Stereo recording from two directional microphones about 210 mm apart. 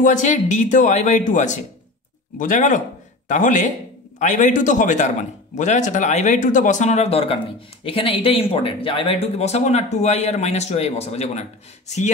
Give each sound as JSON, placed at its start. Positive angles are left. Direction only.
{"t": 0.0, "sound": "a man's voice", "side_deg": 35}